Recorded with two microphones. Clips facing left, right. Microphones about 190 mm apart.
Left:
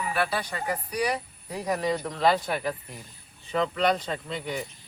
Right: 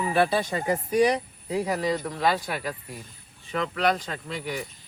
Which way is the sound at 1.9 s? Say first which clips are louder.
Left 1 dB; 20° left (ahead or behind).